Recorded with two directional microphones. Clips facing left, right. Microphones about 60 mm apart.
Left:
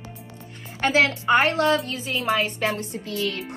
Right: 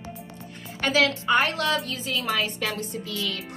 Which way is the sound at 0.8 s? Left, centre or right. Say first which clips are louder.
Left 2 dB; left.